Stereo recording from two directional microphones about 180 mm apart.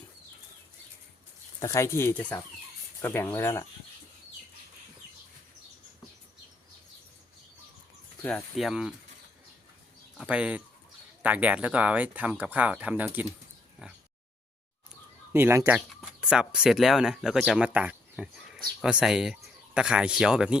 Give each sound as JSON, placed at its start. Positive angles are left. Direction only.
{"t": 1.5, "sound": "speech", "side_deg": 15}
{"t": 8.2, "sound": "speech", "side_deg": 5}
{"t": 10.2, "sound": "speech", "side_deg": -5}
{"t": 15.3, "sound": "speech", "side_deg": -15}